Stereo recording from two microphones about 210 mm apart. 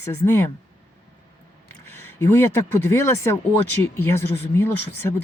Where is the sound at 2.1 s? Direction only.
10° left (ahead or behind).